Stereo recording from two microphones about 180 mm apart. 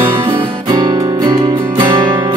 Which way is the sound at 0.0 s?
10° right (ahead or behind).